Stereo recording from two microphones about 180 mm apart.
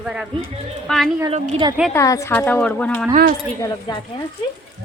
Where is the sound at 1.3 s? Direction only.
30° right (ahead or behind).